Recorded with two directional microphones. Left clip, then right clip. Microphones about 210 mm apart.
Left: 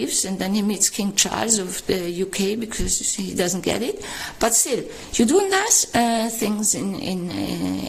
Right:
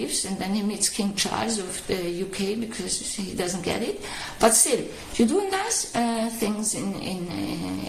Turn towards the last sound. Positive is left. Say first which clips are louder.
# left 5 dB
turn(degrees=50)  # may be behind; listen again after turning